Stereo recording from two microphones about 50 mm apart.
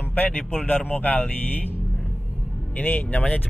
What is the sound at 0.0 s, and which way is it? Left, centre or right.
Speech, left.